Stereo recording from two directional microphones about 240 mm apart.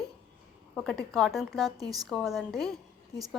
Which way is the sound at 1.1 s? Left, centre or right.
Centre.